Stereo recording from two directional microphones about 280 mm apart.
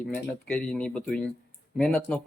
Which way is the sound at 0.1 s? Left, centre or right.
Centre.